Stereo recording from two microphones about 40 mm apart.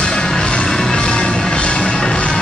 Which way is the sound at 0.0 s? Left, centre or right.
Centre.